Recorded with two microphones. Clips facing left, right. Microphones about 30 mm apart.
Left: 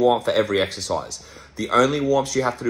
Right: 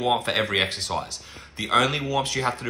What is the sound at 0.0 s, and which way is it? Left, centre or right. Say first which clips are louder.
Speech: left 5 dB; right.